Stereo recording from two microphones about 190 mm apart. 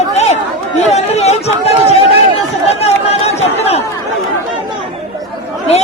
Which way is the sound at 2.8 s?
35° left (ahead or behind).